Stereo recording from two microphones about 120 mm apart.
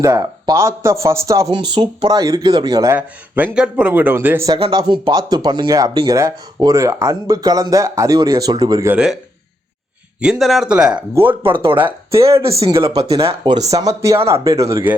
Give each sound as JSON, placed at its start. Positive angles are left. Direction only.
{"t": 0.0, "sound": "speech", "side_deg": -25}
{"t": 1.5, "sound": "speech", "side_deg": -40}
{"t": 2.9, "sound": "speech", "side_deg": -15}
{"t": 4.6, "sound": "speech", "side_deg": -40}
{"t": 8.9, "sound": "speech", "side_deg": -10}
{"t": 10.2, "sound": "speech", "side_deg": -5}
{"t": 11.1, "sound": "speech", "side_deg": -20}
{"t": 11.4, "sound": "speech", "side_deg": -45}
{"t": 13.7, "sound": "speech", "side_deg": -30}